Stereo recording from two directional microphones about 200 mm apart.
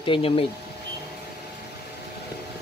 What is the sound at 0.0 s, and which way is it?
Speech, 25° left (ahead or behind).